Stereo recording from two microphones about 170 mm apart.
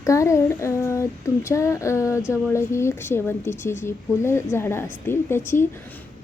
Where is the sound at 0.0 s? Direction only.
15° left (ahead or behind).